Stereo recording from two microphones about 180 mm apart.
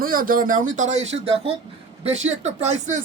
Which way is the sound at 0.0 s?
50° right (ahead or behind).